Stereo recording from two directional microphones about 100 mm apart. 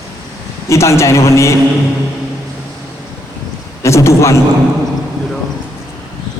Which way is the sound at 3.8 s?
30° left (ahead or behind).